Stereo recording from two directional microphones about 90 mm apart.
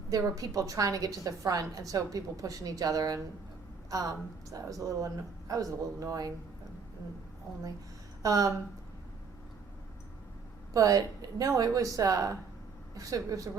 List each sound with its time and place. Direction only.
0.1 s a woman's voice: 40° right (ahead or behind)
8.2 s a woman's voice: 40° right (ahead or behind)
10.8 s a woman's voice: 40° right (ahead or behind)